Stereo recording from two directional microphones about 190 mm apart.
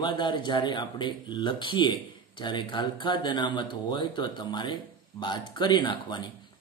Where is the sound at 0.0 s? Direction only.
25° left (ahead or behind).